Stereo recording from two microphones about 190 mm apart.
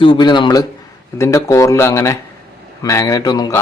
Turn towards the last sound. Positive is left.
turn(degrees=20)  # may be behind; listen again after turning